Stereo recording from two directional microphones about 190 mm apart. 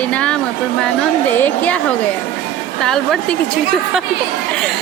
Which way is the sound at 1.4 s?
10° left (ahead or behind).